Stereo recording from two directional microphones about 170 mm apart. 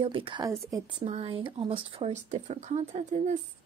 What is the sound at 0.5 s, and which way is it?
Speech, 20° right (ahead or behind).